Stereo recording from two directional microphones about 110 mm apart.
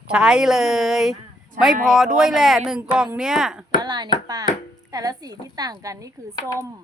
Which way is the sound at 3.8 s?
40° right (ahead or behind).